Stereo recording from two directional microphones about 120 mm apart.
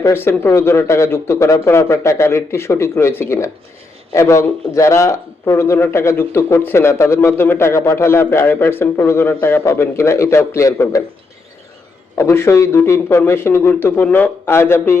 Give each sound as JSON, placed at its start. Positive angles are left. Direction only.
{"t": 0.1, "sound": "a man's voice", "side_deg": 20}
{"t": 12.1, "sound": "a man's voice", "side_deg": 20}